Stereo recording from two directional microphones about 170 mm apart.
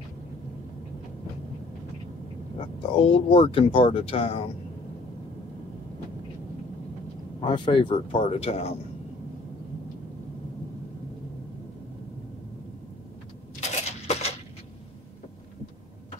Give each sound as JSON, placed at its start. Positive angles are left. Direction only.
{"t": 2.9, "sound": "speech", "side_deg": 30}
{"t": 7.4, "sound": "speech", "side_deg": 30}
{"t": 13.6, "sound": "a sound", "side_deg": 40}